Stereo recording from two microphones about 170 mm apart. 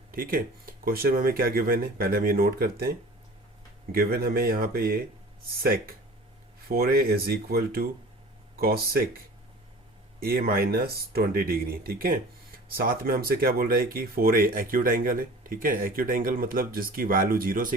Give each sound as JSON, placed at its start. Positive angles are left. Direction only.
{"t": 0.1, "sound": "speech", "side_deg": -55}
{"t": 3.9, "sound": "speech", "side_deg": -60}